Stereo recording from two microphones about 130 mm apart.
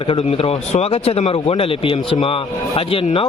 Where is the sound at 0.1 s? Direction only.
50° left (ahead or behind).